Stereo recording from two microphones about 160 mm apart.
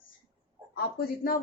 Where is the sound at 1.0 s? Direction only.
70° left (ahead or behind).